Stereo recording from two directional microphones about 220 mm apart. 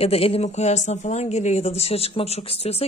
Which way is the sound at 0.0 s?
25° left (ahead or behind).